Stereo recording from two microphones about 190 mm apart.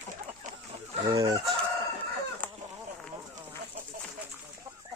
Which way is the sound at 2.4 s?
10° left (ahead or behind).